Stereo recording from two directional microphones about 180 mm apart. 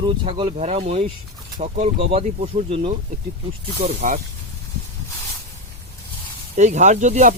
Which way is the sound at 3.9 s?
35° right (ahead or behind).